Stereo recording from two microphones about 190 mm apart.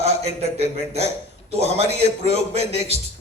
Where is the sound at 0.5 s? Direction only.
35° right (ahead or behind).